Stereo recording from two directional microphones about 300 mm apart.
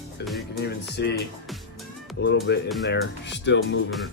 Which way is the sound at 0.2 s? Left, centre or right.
Left.